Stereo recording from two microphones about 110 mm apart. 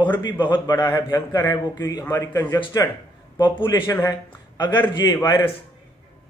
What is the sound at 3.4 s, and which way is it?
A man's voice, 45° left (ahead or behind).